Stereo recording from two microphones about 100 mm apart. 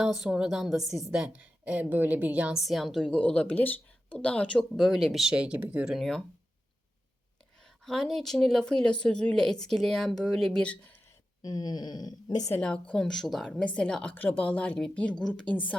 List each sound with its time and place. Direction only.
0.0 s a woman's voice: 5° right (ahead or behind)
2.6 s speech: centre (ahead or behind)
7.6 s speech: 5° left (ahead or behind)
11.4 s speech: 40° left (ahead or behind)
12.5 s a woman's voice: 10° left (ahead or behind)